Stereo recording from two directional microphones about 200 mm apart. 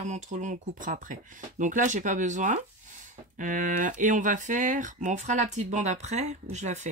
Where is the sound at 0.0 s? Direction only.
35° right (ahead or behind).